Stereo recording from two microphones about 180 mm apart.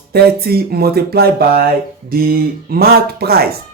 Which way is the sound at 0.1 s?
60° right (ahead or behind).